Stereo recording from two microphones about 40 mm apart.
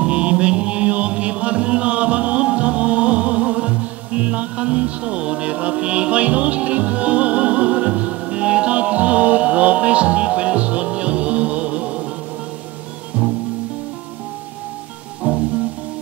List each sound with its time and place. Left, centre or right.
0.0 s music: right
13.2 s music: centre
15.3 s music: right